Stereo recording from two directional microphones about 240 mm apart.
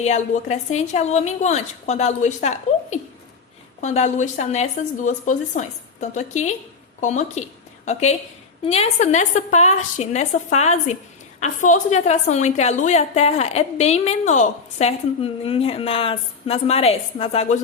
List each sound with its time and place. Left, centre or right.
0.0 s a woman's voice: left
8.6 s a woman's voice: left